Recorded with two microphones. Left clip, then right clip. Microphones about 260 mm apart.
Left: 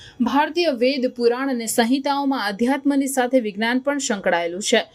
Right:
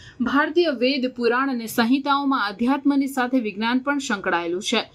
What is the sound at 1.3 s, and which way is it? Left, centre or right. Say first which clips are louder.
Speech: even; left.